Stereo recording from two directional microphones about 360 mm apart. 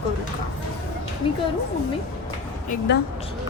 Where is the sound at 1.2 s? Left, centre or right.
Centre.